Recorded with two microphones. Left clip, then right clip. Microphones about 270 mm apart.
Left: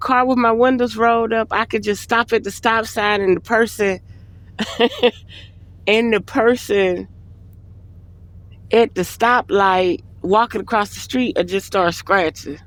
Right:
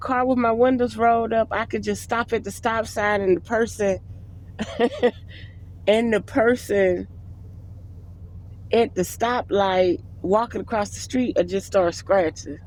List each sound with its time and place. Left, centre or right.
0.0 s speech: centre
8.7 s speech: centre